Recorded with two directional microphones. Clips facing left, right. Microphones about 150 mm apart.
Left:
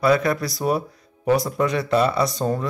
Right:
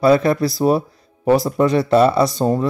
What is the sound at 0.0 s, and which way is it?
Speech, 30° right (ahead or behind).